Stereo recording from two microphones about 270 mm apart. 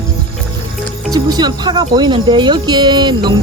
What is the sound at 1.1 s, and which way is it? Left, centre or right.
Speech, centre.